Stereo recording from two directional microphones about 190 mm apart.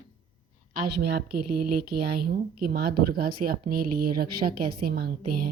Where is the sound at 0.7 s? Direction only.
55° right (ahead or behind).